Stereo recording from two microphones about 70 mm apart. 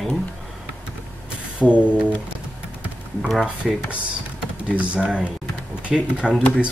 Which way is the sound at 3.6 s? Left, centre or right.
Centre.